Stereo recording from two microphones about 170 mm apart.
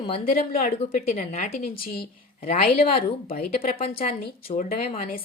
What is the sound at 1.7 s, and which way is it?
Speech, 60° left (ahead or behind).